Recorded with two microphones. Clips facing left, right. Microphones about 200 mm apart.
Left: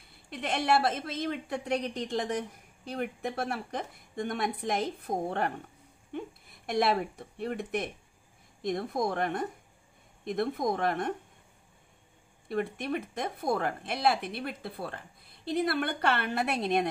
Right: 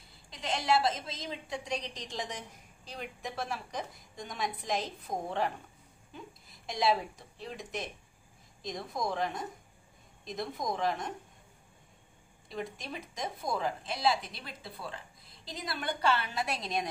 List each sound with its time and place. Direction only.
0.1 s a woman's voice: 60° left (ahead or behind)
12.4 s a woman's voice: 60° left (ahead or behind)